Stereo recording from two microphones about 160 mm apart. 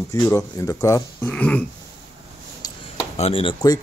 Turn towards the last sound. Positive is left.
turn(degrees=35)  # may be behind; listen again after turning